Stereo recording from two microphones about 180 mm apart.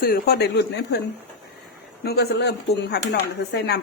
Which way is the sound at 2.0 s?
65° left (ahead or behind).